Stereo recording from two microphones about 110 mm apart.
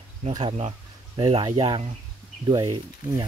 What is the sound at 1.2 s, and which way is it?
Speech, 55° right (ahead or behind).